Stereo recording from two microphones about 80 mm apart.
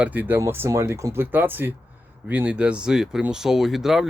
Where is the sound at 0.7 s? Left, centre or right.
Right.